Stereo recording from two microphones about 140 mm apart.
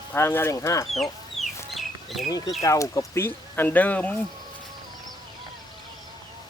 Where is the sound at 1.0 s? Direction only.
Centre (ahead or behind).